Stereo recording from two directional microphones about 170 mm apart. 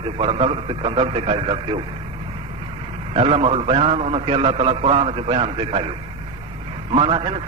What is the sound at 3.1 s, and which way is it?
A man's voice, 35° right (ahead or behind).